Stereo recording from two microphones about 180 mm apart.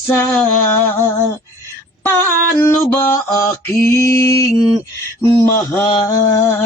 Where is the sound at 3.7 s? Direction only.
15° left (ahead or behind).